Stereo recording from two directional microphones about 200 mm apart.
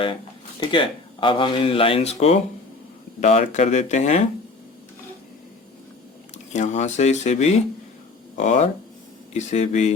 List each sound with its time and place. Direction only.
0.6 s speech: 25° left (ahead or behind)
6.5 s speech: 35° left (ahead or behind)